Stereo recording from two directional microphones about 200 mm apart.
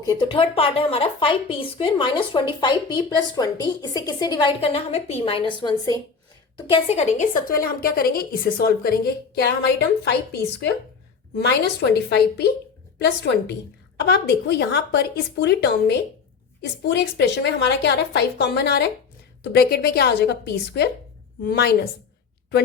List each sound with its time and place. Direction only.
0.0 s a woman's voice: 20° left (ahead or behind); by 21.8 s 55° left (ahead or behind)